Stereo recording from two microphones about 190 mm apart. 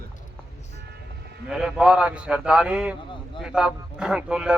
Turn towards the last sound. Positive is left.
turn(degrees=-5)  # may be behind; listen again after turning